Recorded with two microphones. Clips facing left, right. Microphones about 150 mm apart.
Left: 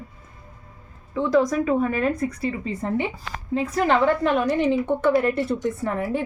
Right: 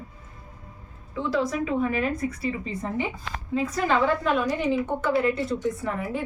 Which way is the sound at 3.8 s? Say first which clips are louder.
Left 4 dB; 60° left (ahead or behind).